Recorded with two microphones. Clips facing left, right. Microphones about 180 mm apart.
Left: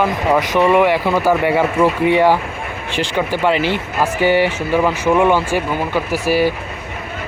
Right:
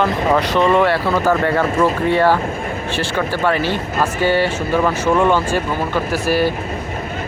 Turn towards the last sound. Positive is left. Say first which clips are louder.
# left 1 dB
turn(degrees=15)  # may be behind; listen again after turning